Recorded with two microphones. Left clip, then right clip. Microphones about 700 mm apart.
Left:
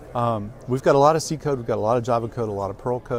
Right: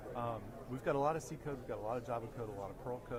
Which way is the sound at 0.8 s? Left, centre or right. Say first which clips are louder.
Left 19 dB; left.